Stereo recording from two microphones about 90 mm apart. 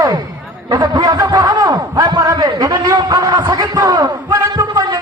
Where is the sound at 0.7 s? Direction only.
50° right (ahead or behind).